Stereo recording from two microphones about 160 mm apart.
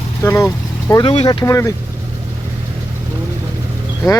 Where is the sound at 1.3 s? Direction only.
20° left (ahead or behind).